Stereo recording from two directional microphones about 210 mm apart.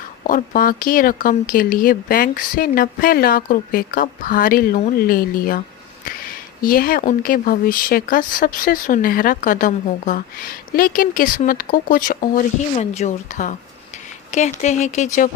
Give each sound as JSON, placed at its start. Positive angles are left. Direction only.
{"t": 0.3, "sound": "speech", "side_deg": 40}